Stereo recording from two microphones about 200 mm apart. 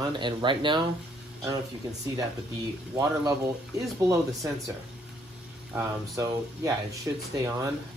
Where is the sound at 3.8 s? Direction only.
15° right (ahead or behind).